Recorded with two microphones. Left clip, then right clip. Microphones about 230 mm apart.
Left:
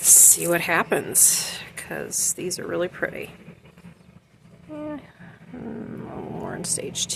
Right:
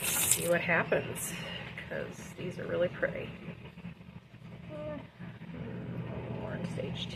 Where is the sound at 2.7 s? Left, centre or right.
Left.